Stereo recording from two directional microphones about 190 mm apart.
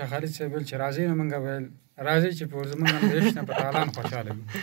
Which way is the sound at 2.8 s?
5° right (ahead or behind).